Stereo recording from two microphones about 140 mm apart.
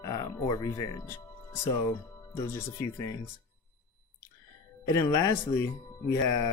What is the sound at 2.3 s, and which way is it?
Speech, 20° left (ahead or behind).